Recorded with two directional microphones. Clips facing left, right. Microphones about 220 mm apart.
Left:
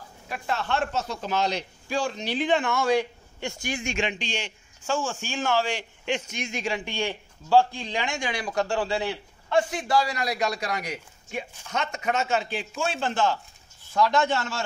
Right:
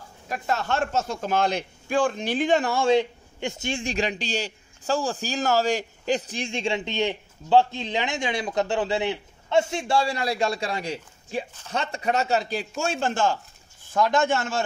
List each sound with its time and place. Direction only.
0.3 s a man's voice: 40° right (ahead or behind)